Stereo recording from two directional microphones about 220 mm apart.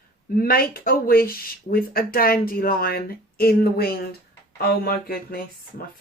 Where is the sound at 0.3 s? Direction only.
45° left (ahead or behind).